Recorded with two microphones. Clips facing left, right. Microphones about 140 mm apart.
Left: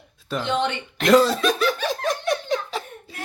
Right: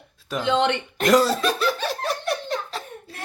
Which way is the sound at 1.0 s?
10° right (ahead or behind).